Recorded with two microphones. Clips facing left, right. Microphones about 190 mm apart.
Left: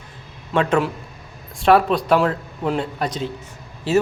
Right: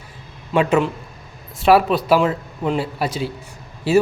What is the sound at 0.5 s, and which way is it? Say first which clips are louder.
A man's voice: right 2 dB; 15° right (ahead or behind).